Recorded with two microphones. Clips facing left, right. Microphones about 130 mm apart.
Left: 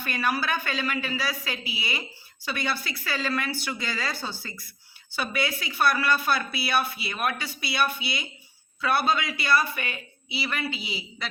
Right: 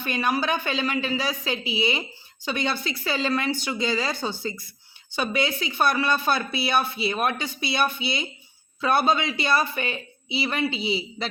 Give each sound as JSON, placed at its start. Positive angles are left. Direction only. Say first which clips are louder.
{"t": 0.0, "sound": "a woman's voice", "louder": "right 3 dB", "side_deg": -20}